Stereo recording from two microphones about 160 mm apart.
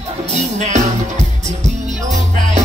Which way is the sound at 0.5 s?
50° right (ahead or behind).